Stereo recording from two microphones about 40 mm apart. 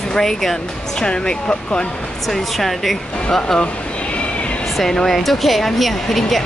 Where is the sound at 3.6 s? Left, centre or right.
Left.